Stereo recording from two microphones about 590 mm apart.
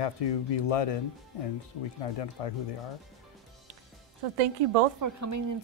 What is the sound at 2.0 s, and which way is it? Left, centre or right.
Speech, left.